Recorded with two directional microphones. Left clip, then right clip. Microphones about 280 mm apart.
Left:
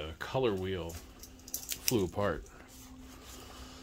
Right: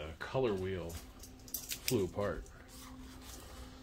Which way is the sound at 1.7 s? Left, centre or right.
Left.